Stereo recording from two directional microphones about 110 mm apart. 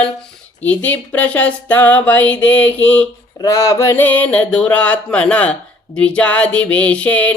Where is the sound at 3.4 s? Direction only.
30° left (ahead or behind).